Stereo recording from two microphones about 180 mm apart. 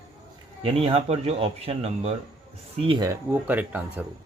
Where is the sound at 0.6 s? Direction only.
35° right (ahead or behind).